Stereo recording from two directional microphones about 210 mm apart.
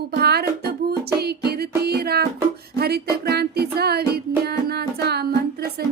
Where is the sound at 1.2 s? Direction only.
50° right (ahead or behind).